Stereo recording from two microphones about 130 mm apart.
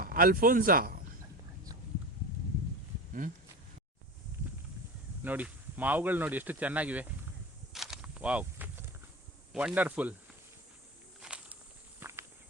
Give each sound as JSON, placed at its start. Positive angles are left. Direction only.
{"t": 0.1, "sound": "speech", "side_deg": -90}
{"t": 3.1, "sound": "speech", "side_deg": -90}
{"t": 5.2, "sound": "speech", "side_deg": -15}
{"t": 7.7, "sound": "a sound", "side_deg": -5}
{"t": 9.5, "sound": "speech", "side_deg": -5}
{"t": 11.2, "sound": "walk", "side_deg": -10}
{"t": 11.9, "sound": "walk", "side_deg": -20}